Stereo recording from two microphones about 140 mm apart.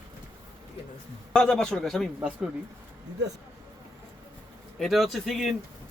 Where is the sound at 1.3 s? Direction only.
5° left (ahead or behind).